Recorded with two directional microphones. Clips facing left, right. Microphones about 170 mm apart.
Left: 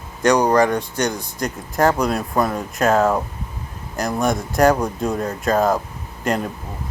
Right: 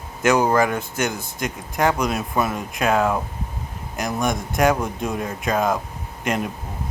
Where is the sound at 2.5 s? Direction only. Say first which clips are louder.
Left 3 dB; 40° left (ahead or behind).